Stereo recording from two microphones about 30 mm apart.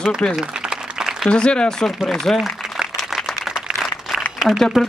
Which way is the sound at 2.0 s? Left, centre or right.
Centre.